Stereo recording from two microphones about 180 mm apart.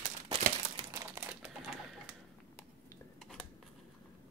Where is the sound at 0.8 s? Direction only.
20° right (ahead or behind).